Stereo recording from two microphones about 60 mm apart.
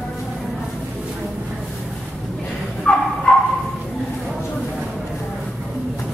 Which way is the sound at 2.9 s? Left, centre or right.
Centre.